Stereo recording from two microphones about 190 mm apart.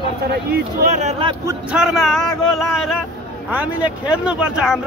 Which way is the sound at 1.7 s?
Centre (ahead or behind).